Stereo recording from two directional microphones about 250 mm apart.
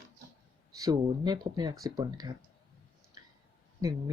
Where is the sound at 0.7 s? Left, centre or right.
Centre.